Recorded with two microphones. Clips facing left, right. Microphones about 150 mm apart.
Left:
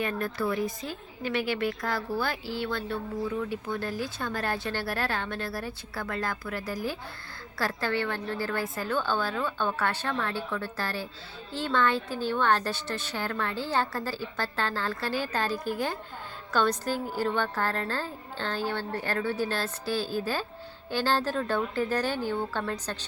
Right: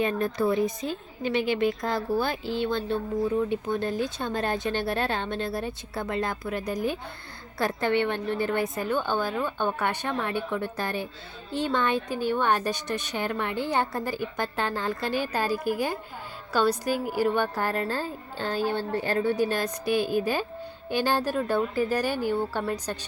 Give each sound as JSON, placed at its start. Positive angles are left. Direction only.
{"t": 0.0, "sound": "a woman's voice", "side_deg": -20}